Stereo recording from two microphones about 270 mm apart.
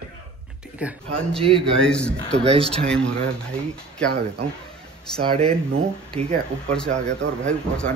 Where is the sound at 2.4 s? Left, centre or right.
Right.